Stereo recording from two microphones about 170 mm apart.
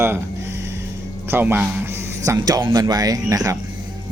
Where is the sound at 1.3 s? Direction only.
10° right (ahead or behind).